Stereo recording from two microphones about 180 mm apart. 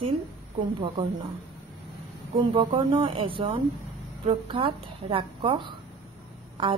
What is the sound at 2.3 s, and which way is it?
A woman's voice, 30° right (ahead or behind).